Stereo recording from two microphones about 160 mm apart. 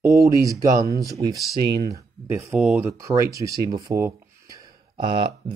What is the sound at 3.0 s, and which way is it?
Speech, 20° right (ahead or behind).